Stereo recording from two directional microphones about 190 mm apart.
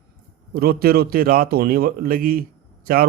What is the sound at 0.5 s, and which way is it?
Speech, 55° right (ahead or behind).